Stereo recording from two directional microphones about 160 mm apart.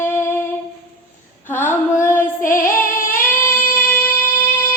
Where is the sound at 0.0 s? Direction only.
15° left (ahead or behind).